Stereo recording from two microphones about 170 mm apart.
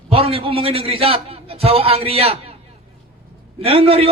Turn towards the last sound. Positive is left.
turn(degrees=-35)  # may be behind; listen again after turning